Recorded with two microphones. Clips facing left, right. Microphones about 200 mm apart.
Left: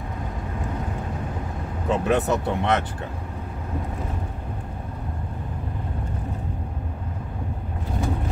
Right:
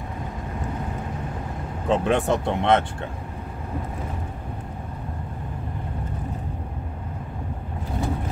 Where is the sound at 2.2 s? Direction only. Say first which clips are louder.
Right 2 dB; 25° right (ahead or behind).